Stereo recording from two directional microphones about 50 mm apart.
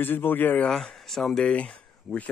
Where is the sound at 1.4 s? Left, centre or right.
Left.